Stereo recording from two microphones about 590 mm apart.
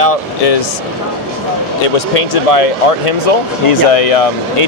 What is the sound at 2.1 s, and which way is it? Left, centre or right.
Speech, left.